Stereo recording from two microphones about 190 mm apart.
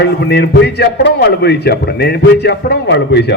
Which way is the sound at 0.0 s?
60° left (ahead or behind).